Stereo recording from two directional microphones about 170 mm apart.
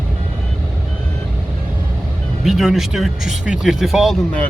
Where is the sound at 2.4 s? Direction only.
Centre (ahead or behind).